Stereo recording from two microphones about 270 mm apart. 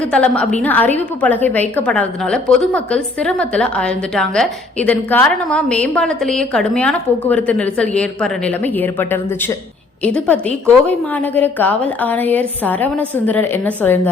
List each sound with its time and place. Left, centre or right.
0.0 s a woman's voice: centre